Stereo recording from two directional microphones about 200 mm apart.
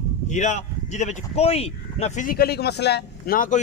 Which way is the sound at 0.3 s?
35° left (ahead or behind).